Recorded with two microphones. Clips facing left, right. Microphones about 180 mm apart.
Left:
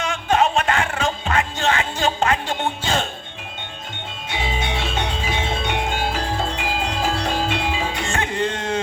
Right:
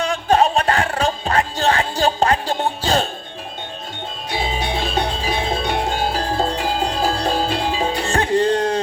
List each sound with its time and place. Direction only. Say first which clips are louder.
0.0 s music: right 3 dB; 35° right (ahead or behind)
4.3 s music: right 3 dB; 35° right (ahead or behind)